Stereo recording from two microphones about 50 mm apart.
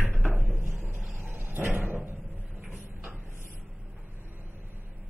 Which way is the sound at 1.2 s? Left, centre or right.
Right.